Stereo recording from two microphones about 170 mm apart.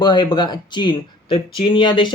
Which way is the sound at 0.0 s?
25° left (ahead or behind).